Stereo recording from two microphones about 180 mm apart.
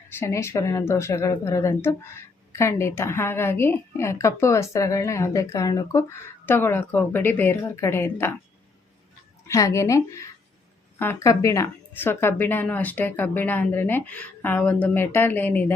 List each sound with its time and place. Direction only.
0.1 s speech: 15° left (ahead or behind)
9.5 s speech: 15° left (ahead or behind)